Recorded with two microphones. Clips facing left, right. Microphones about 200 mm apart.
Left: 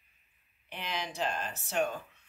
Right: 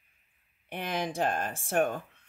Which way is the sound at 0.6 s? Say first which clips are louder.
Right 6 dB; 50° right (ahead or behind).